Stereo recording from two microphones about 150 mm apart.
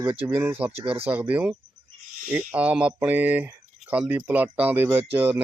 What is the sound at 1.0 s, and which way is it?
Speech, 10° right (ahead or behind).